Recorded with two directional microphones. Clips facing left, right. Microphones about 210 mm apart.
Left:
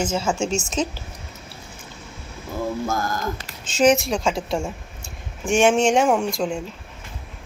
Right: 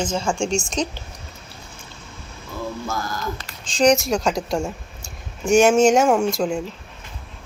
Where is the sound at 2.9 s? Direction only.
50° left (ahead or behind).